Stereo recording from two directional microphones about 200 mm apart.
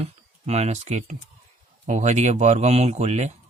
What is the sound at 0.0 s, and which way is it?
A man's voice, 30° right (ahead or behind).